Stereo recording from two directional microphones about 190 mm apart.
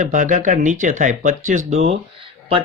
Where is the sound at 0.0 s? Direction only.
40° right (ahead or behind).